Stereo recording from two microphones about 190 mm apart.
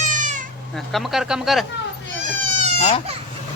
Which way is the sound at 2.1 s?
40° right (ahead or behind).